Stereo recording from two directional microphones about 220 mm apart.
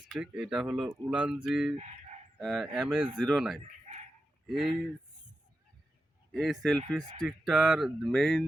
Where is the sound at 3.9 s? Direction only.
30° right (ahead or behind).